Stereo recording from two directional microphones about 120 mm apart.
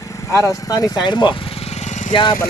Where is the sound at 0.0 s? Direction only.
25° left (ahead or behind); by 2.1 s 75° left (ahead or behind).